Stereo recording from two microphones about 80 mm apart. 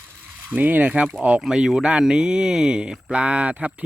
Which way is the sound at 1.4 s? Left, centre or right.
Centre.